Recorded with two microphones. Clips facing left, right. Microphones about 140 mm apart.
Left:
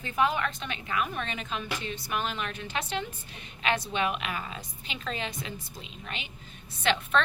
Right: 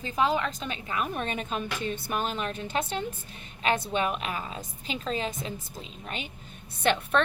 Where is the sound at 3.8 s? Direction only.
40° right (ahead or behind).